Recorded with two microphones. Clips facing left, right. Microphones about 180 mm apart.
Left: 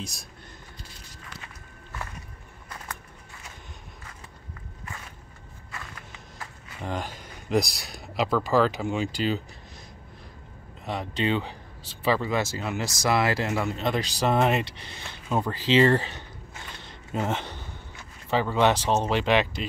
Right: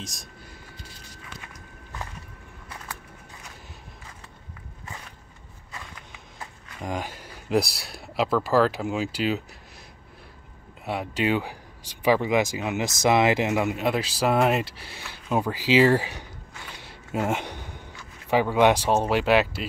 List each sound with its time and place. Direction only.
0.0 s speech: centre (ahead or behind)
6.4 s speech: 10° right (ahead or behind)
10.9 s speech: 10° right (ahead or behind)
16.7 s a sound: 10° right (ahead or behind)
18.3 s speech: 10° right (ahead or behind)